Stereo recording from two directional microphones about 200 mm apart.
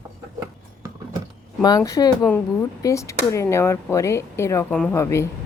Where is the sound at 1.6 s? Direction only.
20° left (ahead or behind).